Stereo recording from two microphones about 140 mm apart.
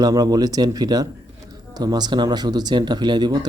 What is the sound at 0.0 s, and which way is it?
A man's voice, 25° right (ahead or behind).